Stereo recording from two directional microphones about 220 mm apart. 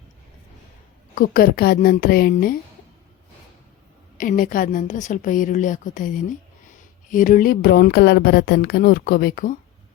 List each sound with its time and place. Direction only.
1.1 s speech: 40° left (ahead or behind)
4.2 s a woman's voice: 40° left (ahead or behind)